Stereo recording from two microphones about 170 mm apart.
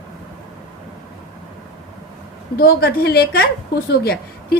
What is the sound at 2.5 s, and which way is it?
A woman's voice, 60° left (ahead or behind).